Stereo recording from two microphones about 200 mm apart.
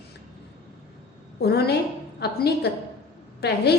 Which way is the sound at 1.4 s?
55° left (ahead or behind).